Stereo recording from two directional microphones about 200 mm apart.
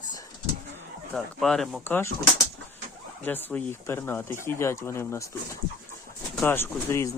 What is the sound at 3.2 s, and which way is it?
Speech, 10° left (ahead or behind).